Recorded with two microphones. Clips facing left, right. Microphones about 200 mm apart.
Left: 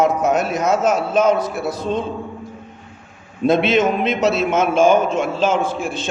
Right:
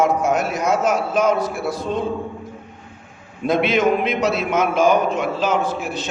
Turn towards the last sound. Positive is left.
turn(degrees=25)  # may be behind; listen again after turning